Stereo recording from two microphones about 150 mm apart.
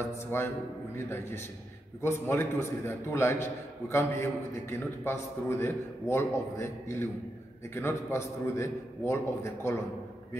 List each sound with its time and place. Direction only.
0.3 s a man's voice: 15° left (ahead or behind)